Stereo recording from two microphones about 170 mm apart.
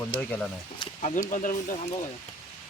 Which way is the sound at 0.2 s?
10° left (ahead or behind).